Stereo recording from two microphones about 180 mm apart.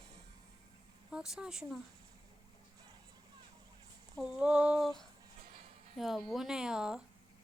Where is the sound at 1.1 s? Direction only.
5° right (ahead or behind).